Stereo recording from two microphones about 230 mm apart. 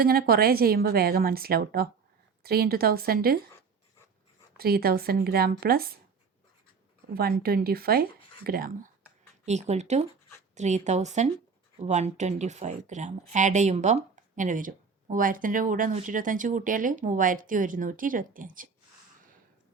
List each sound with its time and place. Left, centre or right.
0.0 s speech: right
4.5 s speech: right
7.1 s speech: right
9.5 s speech: right